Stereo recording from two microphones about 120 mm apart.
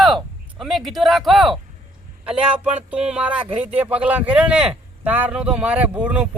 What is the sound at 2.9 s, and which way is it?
Speech, 10° right (ahead or behind).